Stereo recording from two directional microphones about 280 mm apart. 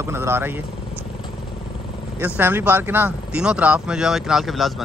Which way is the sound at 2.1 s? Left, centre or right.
Centre.